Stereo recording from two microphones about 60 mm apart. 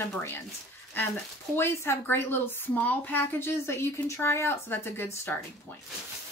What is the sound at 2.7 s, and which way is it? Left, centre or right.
A woman's voice, left.